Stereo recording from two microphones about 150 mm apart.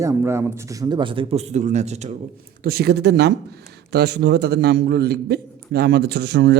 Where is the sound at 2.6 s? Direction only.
90° right.